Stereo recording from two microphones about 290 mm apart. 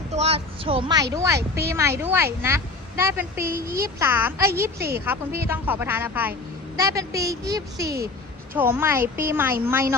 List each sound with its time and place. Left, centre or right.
0.1 s a woman's voice: right